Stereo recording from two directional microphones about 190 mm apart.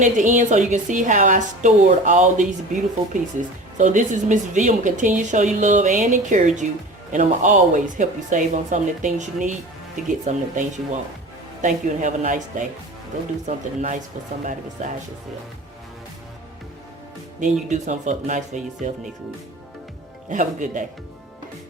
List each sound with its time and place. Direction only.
0.0 s a woman's voice: 40° right (ahead or behind)
17.4 s a woman's voice: 40° right (ahead or behind)
20.3 s speech: 40° right (ahead or behind)